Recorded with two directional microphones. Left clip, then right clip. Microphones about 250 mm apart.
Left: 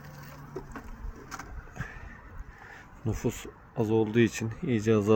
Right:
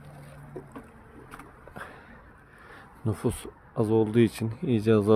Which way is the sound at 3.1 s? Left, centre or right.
Centre.